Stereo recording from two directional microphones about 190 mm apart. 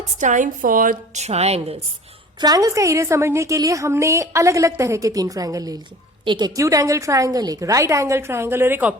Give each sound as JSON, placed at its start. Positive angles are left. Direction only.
{"t": 0.2, "sound": "a woman's voice", "side_deg": -40}
{"t": 2.4, "sound": "a woman's voice", "side_deg": -20}